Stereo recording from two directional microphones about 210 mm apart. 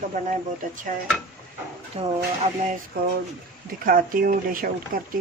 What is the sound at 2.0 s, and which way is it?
Speech, 30° right (ahead or behind).